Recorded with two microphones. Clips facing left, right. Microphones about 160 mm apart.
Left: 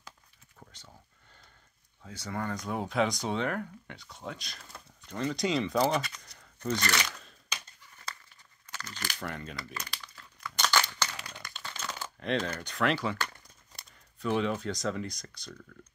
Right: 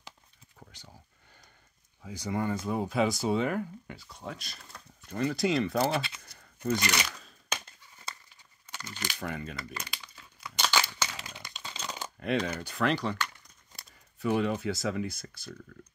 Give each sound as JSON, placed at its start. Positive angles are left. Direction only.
{"t": 0.7, "sound": "speech", "side_deg": -10}
{"t": 2.0, "sound": "speech", "side_deg": -10}
{"t": 7.1, "sound": "a sound", "side_deg": 0}
{"t": 8.6, "sound": "a sound", "side_deg": -10}
{"t": 9.2, "sound": "crumpling", "side_deg": -5}
{"t": 11.4, "sound": "shuffling cards", "side_deg": -15}
{"t": 13.7, "sound": "speech", "side_deg": -5}